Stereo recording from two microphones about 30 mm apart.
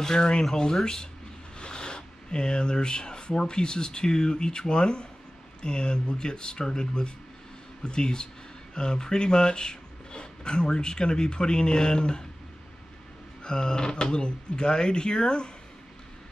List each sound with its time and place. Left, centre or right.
0.0 s speech: left
1.6 s speech: left
13.4 s speech: left